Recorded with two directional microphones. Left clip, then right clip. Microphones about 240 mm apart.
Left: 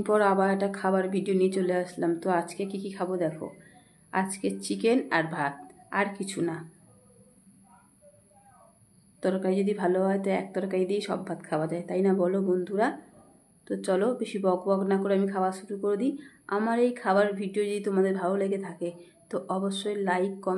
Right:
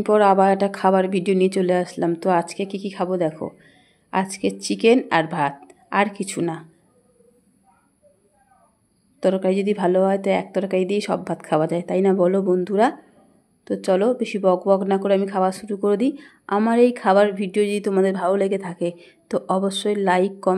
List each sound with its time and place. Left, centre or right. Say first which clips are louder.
0.0 s speech: right 8 dB; right
9.2 s speech: right 7 dB; right